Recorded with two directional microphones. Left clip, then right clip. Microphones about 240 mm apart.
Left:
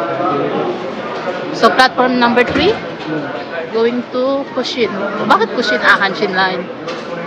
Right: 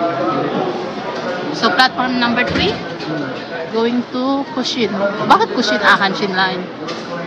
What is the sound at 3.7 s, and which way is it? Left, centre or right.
Speech, centre.